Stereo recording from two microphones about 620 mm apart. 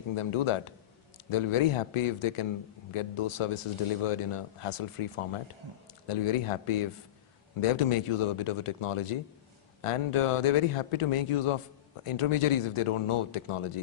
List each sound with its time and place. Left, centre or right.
0.2 s speech: left